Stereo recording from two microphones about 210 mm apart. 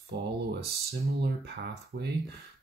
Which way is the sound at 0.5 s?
50° right (ahead or behind).